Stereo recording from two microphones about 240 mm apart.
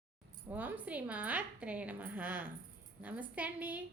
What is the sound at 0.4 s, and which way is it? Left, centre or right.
A woman's voice, centre.